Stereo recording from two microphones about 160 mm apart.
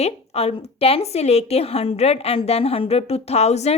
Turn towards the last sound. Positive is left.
turn(degrees=45)  # may be behind; listen again after turning